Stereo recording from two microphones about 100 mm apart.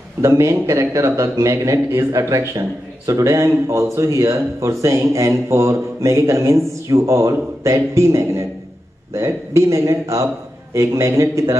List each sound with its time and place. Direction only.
0.2 s speech: 30° right (ahead or behind)